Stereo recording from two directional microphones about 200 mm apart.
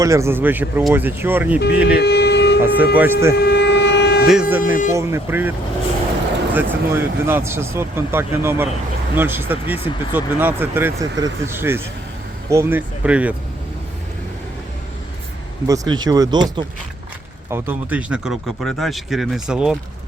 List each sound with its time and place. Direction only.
0.0 s speech: 15° right (ahead or behind)
2.0 s a sound: 55° left (ahead or behind)
2.9 s speech: 10° right (ahead or behind)
3.3 s vehicle: 55° left (ahead or behind)
4.3 s speech: 5° right (ahead or behind)
4.6 s speech: 40° left (ahead or behind)
4.9 s speech: 10° right (ahead or behind)
15.6 s speech: 15° right (ahead or behind)
17.5 s speech: 10° right (ahead or behind)